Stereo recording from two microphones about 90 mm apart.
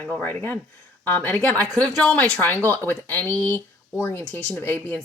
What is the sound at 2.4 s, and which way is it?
A woman's voice, 25° left (ahead or behind).